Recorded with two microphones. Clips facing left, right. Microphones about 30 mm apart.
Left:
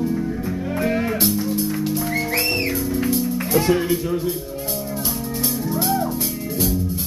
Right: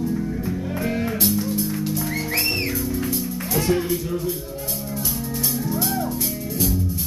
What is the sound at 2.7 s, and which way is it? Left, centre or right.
Music, centre.